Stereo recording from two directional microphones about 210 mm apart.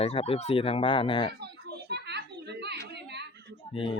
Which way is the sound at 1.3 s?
50° right (ahead or behind).